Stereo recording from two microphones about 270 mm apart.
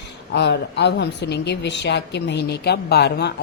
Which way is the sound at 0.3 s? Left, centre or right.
Left.